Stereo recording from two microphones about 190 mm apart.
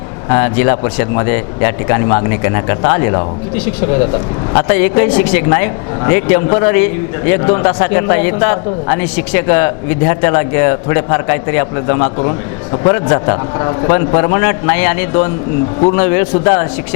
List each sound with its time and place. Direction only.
0.3 s a man's voice: 25° left (ahead or behind)
4.5 s a man's voice: 25° left (ahead or behind)